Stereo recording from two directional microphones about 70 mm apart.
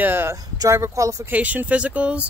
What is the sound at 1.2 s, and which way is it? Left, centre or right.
Speech, right.